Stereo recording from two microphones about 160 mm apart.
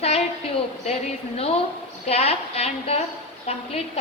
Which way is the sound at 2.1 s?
40° left (ahead or behind).